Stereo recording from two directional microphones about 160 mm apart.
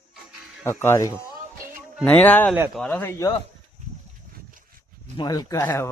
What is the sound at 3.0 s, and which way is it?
Speech, 15° left (ahead or behind).